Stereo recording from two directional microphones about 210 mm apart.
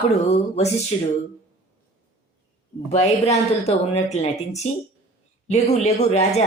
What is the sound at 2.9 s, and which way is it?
A woman's voice, 30° left (ahead or behind).